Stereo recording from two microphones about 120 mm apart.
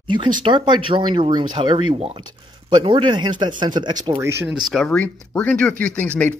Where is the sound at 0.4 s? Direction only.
40° right (ahead or behind).